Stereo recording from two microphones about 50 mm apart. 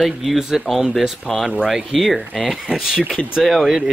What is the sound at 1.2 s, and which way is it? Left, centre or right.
Speech, centre.